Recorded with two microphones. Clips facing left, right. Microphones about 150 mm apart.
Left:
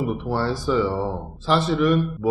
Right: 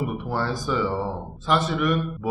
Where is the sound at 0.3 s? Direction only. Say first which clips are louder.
Left 4 dB; 30° left (ahead or behind).